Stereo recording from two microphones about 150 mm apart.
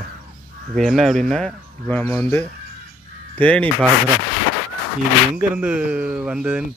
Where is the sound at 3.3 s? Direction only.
10° left (ahead or behind).